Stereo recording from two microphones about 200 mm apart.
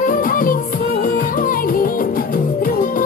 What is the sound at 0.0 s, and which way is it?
Music, 45° left (ahead or behind).